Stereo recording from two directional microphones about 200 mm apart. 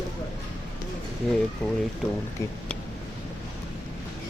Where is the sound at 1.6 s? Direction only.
5° left (ahead or behind).